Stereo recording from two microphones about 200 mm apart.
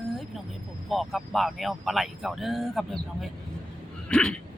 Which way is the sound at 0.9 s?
Centre (ahead or behind).